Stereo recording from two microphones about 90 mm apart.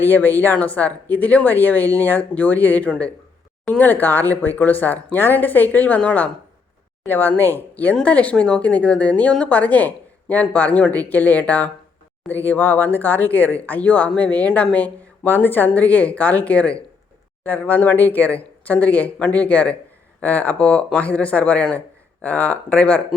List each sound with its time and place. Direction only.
0.0 s speech: 25° left (ahead or behind)